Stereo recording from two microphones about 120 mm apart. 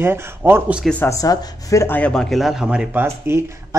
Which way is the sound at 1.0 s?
30° left (ahead or behind).